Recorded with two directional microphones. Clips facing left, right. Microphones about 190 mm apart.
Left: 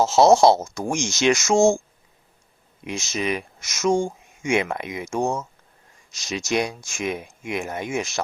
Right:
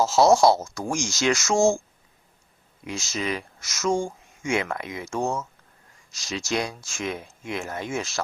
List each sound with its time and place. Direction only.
0.0 s speech: 20° left (ahead or behind)
2.8 s speech: 20° left (ahead or behind)